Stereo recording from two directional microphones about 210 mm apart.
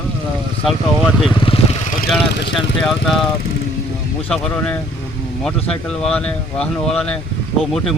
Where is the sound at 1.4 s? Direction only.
25° left (ahead or behind).